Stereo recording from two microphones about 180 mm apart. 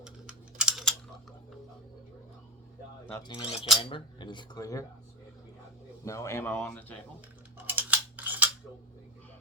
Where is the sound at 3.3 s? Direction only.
30° left (ahead or behind).